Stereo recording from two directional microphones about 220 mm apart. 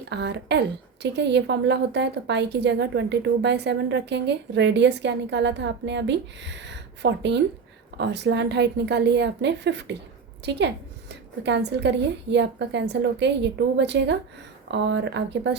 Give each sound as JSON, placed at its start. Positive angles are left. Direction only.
{"t": 0.1, "sound": "a woman's voice", "side_deg": -50}